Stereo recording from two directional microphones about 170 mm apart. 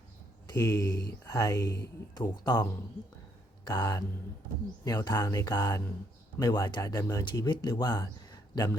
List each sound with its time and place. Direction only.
0.5 s speech: 15° left (ahead or behind)